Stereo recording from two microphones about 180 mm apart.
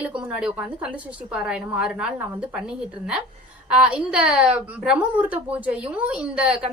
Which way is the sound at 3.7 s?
5° right (ahead or behind).